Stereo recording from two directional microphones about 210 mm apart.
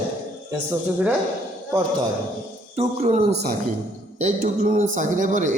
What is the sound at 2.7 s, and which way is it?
A man's voice, 30° right (ahead or behind).